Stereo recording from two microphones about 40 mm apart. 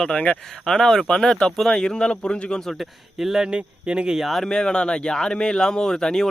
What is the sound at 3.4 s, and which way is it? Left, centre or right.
Speech, right.